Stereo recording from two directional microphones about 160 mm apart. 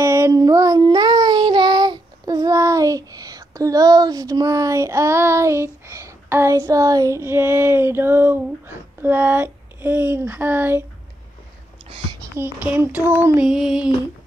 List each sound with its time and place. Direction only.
0.0 s child singing: 15° right (ahead or behind)
12.4 s speech: 10° right (ahead or behind)
13.5 s a sound: 5° right (ahead or behind)